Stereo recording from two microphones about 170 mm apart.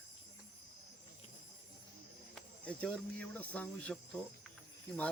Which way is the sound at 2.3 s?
5° left (ahead or behind).